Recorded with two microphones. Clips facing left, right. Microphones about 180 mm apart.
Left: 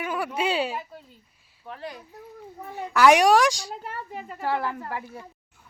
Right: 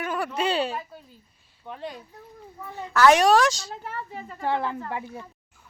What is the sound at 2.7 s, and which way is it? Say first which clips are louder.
A woman's voice: even; 15° left (ahead or behind).